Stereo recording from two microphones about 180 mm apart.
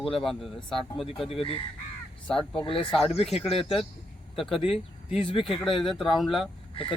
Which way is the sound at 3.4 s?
30° left (ahead or behind).